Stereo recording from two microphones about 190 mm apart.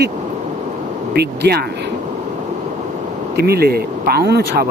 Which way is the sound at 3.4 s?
55° right (ahead or behind).